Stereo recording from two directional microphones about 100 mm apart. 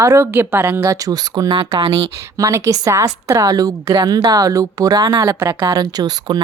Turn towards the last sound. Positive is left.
turn(degrees=-45)  # may be behind; listen again after turning